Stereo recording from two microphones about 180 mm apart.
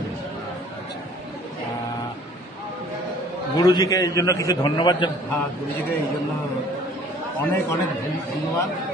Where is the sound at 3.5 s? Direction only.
20° left (ahead or behind).